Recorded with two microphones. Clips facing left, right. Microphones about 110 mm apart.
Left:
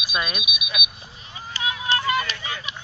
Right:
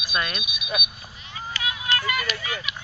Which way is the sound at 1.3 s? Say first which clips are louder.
Left 2 dB; 30° left (ahead or behind).